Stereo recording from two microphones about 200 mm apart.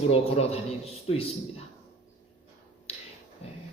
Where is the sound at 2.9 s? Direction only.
30° left (ahead or behind).